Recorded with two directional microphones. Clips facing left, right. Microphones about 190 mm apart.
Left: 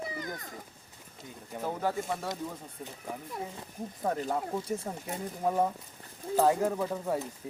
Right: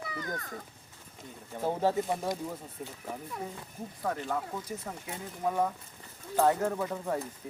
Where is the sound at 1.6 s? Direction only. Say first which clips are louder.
Right 4 dB; 25° right (ahead or behind).